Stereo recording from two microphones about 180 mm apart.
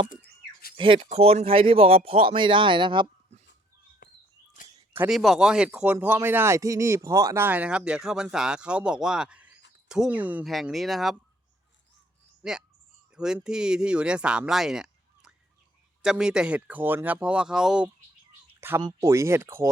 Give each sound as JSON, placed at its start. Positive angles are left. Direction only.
{"t": 0.8, "sound": "speech", "side_deg": -30}
{"t": 4.0, "sound": "walk", "side_deg": 55}
{"t": 4.9, "sound": "speech", "side_deg": -5}
{"t": 12.4, "sound": "speech", "side_deg": -5}
{"t": 18.8, "sound": "speech", "side_deg": -20}